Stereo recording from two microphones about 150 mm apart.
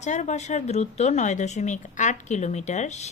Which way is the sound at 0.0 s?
55° left (ahead or behind).